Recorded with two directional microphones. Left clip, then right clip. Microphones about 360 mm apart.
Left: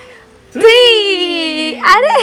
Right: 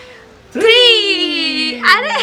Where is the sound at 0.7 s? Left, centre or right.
Centre.